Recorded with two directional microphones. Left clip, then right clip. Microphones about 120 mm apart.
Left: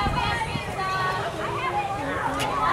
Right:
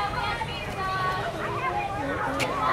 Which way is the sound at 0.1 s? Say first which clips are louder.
Left 3 dB; 50° left (ahead or behind).